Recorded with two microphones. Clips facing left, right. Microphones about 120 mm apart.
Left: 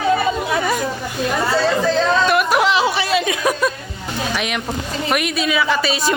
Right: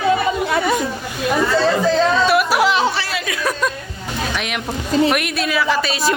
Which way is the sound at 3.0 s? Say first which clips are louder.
Left 5 dB; 20° left (ahead or behind).